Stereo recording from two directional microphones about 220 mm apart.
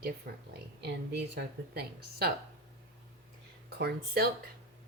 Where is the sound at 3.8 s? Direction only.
45° right (ahead or behind).